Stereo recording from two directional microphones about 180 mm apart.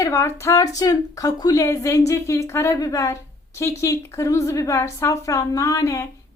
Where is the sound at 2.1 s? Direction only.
15° left (ahead or behind).